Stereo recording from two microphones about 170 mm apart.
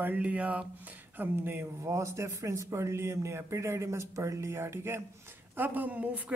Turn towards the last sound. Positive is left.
turn(degrees=-10)  # may be behind; listen again after turning